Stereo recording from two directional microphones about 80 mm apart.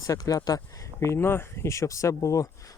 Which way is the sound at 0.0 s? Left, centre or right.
Left.